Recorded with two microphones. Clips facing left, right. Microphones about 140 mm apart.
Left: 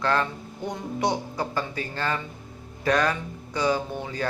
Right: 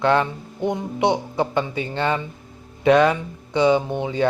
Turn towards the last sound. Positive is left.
turn(degrees=-20)  # may be behind; listen again after turning